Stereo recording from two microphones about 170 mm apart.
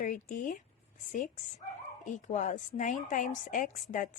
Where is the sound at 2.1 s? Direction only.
45° left (ahead or behind).